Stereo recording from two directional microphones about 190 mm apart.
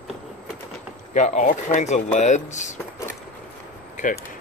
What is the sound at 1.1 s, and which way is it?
Speech, 40° left (ahead or behind).